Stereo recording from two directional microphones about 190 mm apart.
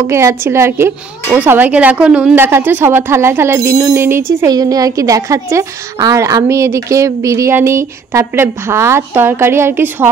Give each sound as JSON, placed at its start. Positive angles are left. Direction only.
{"t": 0.0, "sound": "speech", "side_deg": -15}